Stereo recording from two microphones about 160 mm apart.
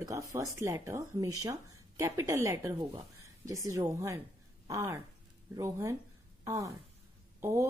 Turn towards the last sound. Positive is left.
turn(degrees=-20)  # may be behind; listen again after turning